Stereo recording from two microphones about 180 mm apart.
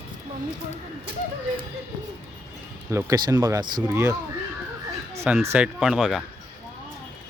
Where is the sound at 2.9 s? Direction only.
20° right (ahead or behind).